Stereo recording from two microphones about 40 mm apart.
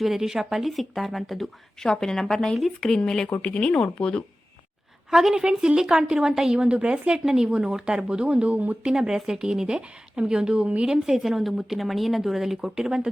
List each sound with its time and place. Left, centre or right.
0.0 s speech: centre
0.7 s speech: centre
1.8 s a woman's voice: centre
3.4 s speech: left
5.1 s speech: centre
5.4 s speech: right
8.5 s speech: right
8.9 s speech: centre
11.0 s speech: centre